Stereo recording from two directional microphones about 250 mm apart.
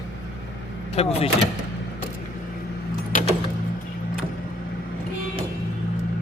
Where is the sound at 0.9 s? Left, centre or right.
Left.